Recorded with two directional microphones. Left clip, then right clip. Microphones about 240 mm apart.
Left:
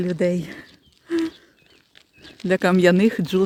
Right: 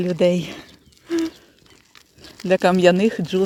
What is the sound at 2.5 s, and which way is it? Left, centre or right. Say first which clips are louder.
Speech: right 2 dB; centre.